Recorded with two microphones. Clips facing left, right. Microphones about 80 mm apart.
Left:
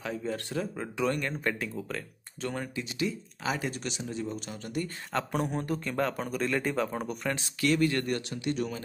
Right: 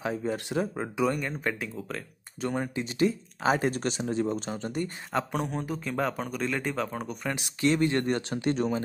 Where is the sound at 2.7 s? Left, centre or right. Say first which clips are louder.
Right 6 dB; right.